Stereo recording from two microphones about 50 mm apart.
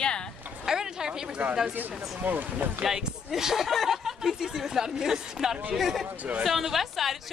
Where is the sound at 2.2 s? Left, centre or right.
Right.